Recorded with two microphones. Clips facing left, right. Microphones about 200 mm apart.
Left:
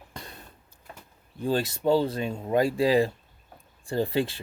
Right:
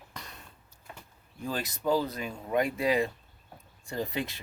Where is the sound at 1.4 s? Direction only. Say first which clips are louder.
Left 8 dB; 30° left (ahead or behind).